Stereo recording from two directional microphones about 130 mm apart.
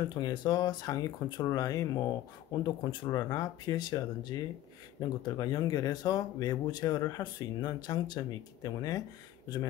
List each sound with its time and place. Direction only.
0.1 s speech: 35° left (ahead or behind)
2.6 s speech: 35° left (ahead or behind)